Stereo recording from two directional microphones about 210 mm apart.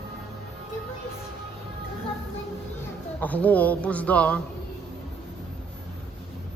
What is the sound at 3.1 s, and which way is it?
A man's voice, 5° left (ahead or behind).